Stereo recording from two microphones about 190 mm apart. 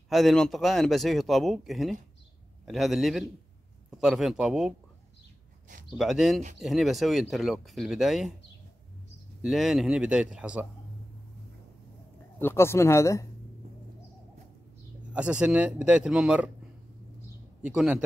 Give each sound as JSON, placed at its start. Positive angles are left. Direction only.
{"t": 0.1, "sound": "speech", "side_deg": 0}
{"t": 5.9, "sound": "speech", "side_deg": 0}
{"t": 9.4, "sound": "speech", "side_deg": 0}
{"t": 12.4, "sound": "speech", "side_deg": 10}
{"t": 15.1, "sound": "speech", "side_deg": -5}
{"t": 17.6, "sound": "speech", "side_deg": -5}